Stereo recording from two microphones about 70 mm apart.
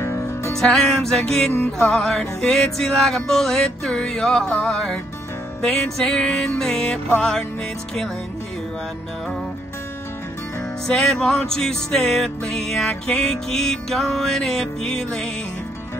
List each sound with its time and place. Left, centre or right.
0.0 s music: left
0.5 s music: centre
10.9 s music: centre